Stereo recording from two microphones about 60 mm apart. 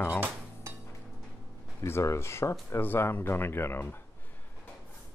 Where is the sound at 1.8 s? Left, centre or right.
Left.